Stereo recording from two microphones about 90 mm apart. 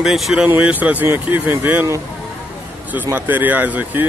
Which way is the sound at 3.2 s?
20° right (ahead or behind).